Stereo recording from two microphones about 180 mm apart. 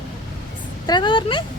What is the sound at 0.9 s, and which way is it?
Speech, 25° left (ahead or behind).